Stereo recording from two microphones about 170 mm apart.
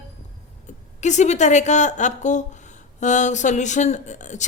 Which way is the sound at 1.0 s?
45° left (ahead or behind).